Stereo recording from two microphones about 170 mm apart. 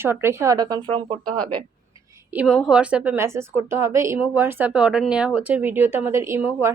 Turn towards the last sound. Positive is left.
turn(degrees=-15)  # may be behind; listen again after turning